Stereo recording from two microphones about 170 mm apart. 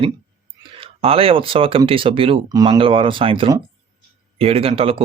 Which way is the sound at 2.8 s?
30° right (ahead or behind).